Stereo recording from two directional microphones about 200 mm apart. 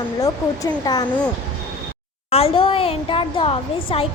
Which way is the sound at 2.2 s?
30° left (ahead or behind).